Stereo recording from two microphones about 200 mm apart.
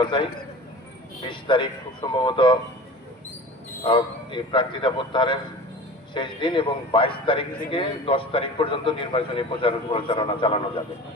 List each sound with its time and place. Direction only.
1.3 s a man's voice: 25° left (ahead or behind)
3.8 s a man's voice: 25° left (ahead or behind)